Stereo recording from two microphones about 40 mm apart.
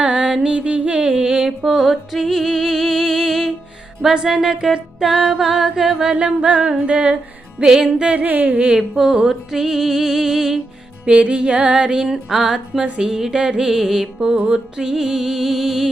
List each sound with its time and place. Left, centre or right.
0.0 s music: right
1.0 s music: right
6.1 s music: right
8.7 s music: centre
11.0 s music: right
12.0 s music: centre
13.3 s music: right
13.7 s music: centre
14.3 s music: right
14.8 s music: centre